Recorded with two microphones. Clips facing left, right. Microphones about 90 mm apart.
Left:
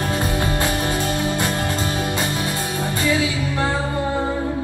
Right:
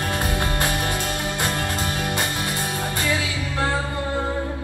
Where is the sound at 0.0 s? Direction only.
25° left (ahead or behind).